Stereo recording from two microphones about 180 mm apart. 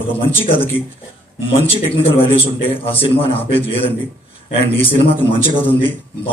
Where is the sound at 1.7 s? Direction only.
30° left (ahead or behind).